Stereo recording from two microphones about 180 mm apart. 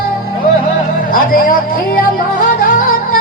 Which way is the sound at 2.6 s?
50° left (ahead or behind).